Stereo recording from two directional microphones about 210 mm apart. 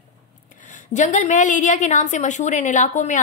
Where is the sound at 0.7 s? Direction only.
40° left (ahead or behind).